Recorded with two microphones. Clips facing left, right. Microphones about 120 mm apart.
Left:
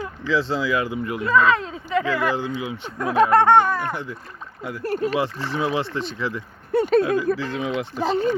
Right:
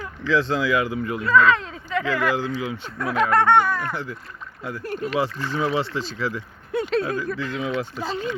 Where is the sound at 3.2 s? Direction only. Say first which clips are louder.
Left 3 dB; 30° left (ahead or behind).